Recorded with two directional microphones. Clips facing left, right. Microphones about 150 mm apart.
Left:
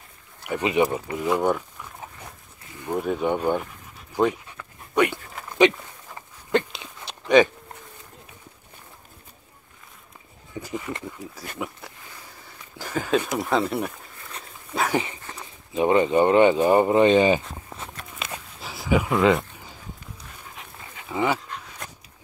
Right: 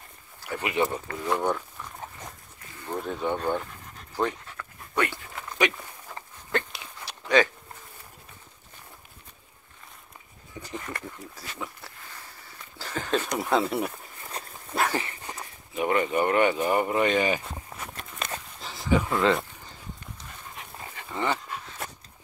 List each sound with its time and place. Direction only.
0.4 s speech: 20° left (ahead or behind)
1.3 s a sound: 10° left (ahead or behind)
2.7 s speech: 15° left (ahead or behind)
4.1 s dog: 15° left (ahead or behind)
6.5 s walk: 20° left (ahead or behind)
10.6 s a sound: 5° left (ahead or behind)
11.5 s speech: 15° left (ahead or behind)
13.2 s speech: centre (ahead or behind)
14.9 s dog: 20° left (ahead or behind)
15.7 s speech: 25° left (ahead or behind)
18.2 s a sound: 10° left (ahead or behind)
20.5 s dog: 5° left (ahead or behind)
21.5 s a sound: centre (ahead or behind)